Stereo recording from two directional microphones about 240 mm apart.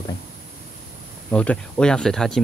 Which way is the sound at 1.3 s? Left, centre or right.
Centre.